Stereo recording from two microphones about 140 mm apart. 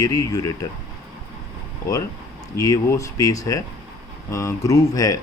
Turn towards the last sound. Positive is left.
turn(degrees=25)  # may be behind; listen again after turning